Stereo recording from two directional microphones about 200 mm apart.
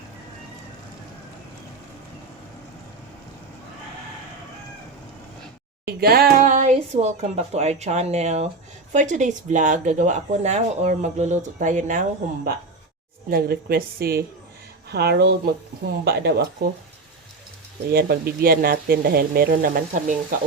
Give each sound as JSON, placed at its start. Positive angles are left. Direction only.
{"t": 5.8, "sound": "speech", "side_deg": -50}
{"t": 13.3, "sound": "speech", "side_deg": -50}
{"t": 17.9, "sound": "speech", "side_deg": -50}